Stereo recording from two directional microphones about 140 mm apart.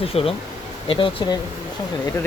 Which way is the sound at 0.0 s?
45° left (ahead or behind).